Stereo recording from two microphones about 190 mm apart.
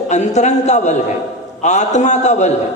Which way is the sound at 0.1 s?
40° left (ahead or behind).